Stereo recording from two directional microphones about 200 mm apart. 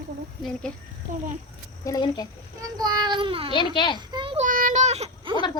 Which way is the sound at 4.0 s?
20° right (ahead or behind).